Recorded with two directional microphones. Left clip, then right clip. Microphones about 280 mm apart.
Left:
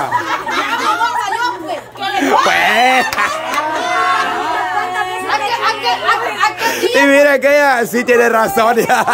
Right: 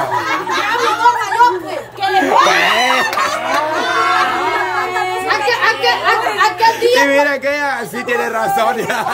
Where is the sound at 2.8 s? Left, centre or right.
Centre.